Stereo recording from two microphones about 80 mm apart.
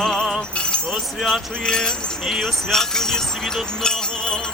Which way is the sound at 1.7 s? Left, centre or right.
Centre.